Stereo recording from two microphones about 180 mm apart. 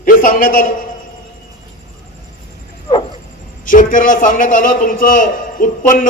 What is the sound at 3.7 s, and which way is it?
A man's voice, 45° left (ahead or behind).